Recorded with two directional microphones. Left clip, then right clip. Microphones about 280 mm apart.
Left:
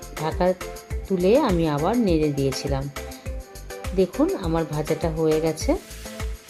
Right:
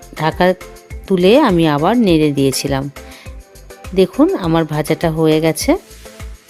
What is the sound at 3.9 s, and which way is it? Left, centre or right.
A woman's voice, right.